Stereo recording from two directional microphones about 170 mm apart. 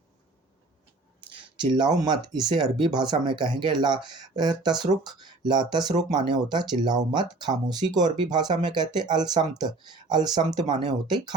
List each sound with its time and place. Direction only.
1.7 s speech: 25° right (ahead or behind)